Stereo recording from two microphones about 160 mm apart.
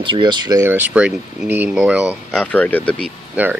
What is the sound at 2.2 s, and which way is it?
Speech, 5° left (ahead or behind).